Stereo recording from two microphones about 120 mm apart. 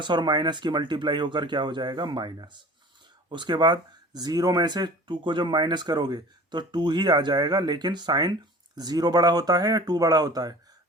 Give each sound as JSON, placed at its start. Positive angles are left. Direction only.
{"t": 0.0, "sound": "speech", "side_deg": -40}